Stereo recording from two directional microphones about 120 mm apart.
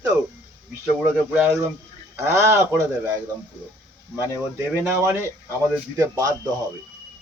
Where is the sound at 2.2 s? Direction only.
25° right (ahead or behind).